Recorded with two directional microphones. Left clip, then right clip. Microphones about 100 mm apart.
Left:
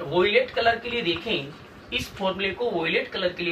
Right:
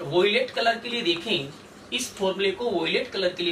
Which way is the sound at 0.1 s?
20° left (ahead or behind).